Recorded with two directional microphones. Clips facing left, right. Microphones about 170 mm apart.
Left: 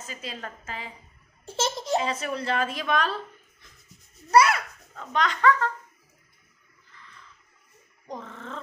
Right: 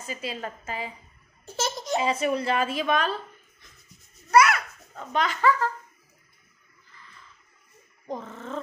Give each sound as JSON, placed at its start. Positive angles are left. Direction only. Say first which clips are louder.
{"t": 0.0, "sound": "a woman's voice", "louder": "right 4 dB", "side_deg": -10}
{"t": 1.4, "sound": "baby laughter", "louder": "left 2 dB", "side_deg": 25}
{"t": 2.0, "sound": "a woman's voice", "louder": "right 6 dB", "side_deg": -10}
{"t": 4.3, "sound": "a child's voice", "louder": "even", "side_deg": 30}
{"t": 4.9, "sound": "a child's voice", "louder": "even", "side_deg": -5}
{"t": 8.1, "sound": "a woman's voice", "louder": "right 3 dB", "side_deg": -5}